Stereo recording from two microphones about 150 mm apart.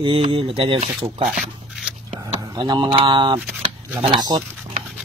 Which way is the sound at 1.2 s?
5° right (ahead or behind).